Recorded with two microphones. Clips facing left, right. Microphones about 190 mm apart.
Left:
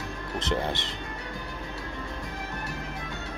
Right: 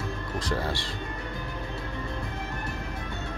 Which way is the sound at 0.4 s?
20° left (ahead or behind).